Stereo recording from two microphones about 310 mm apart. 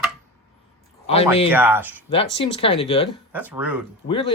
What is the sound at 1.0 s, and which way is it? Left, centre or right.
Speech, centre.